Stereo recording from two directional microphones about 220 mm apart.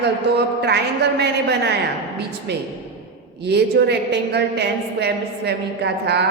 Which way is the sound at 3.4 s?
50° right (ahead or behind).